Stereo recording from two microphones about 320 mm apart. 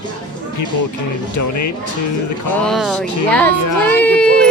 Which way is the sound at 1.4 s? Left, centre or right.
Left.